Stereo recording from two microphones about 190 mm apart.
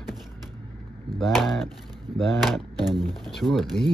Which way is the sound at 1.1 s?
Centre (ahead or behind).